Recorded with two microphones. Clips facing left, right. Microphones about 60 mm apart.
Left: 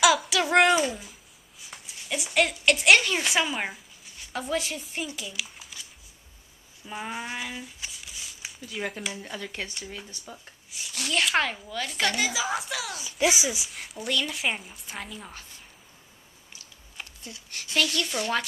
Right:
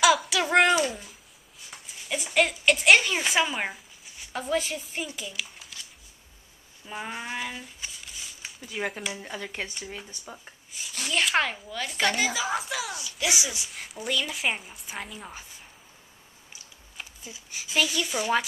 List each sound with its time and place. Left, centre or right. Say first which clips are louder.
0.0 s a sound: even; centre
0.8 s babbling: left 1 dB; centre
1.7 s a sound: even; centre
6.9 s speech: even; centre
10.7 s a woman's voice: left 1 dB; centre
13.0 s a child's voice: left 4 dB; left
13.7 s a woman's voice: even; centre
16.9 s speech: even; centre